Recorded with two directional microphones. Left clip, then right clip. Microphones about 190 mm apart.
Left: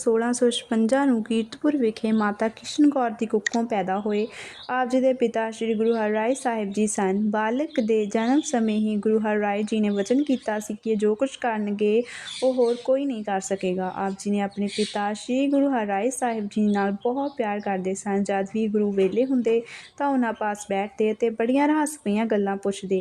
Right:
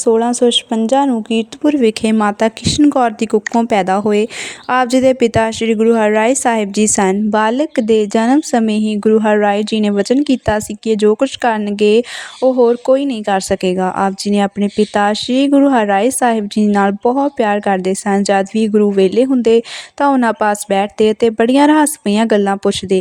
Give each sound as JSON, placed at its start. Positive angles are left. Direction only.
{"t": 0.0, "sound": "a woman's voice", "side_deg": -30}